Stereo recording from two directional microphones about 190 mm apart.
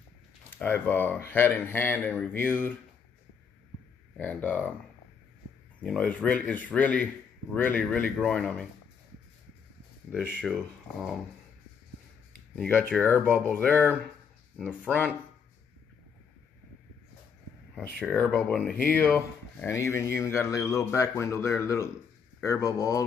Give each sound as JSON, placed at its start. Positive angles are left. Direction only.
{"t": 0.5, "sound": "speech", "side_deg": 10}
{"t": 4.2, "sound": "speech", "side_deg": 10}
{"t": 5.8, "sound": "speech", "side_deg": 5}
{"t": 10.1, "sound": "speech", "side_deg": 0}
{"t": 12.5, "sound": "speech", "side_deg": 5}
{"t": 17.8, "sound": "speech", "side_deg": 5}
{"t": 18.9, "sound": "speech", "side_deg": 10}